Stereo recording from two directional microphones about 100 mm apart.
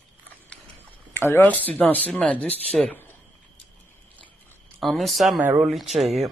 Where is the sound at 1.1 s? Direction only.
25° left (ahead or behind).